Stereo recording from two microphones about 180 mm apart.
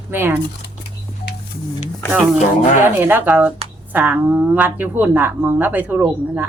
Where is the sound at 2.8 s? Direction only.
10° right (ahead or behind).